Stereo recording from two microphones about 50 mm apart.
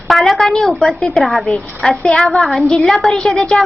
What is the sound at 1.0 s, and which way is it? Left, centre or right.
A woman's voice, centre.